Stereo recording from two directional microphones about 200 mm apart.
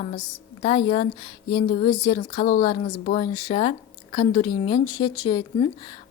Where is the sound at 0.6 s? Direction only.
30° left (ahead or behind).